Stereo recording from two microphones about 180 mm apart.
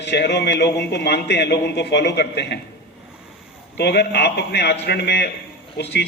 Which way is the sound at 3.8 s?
65° left (ahead or behind).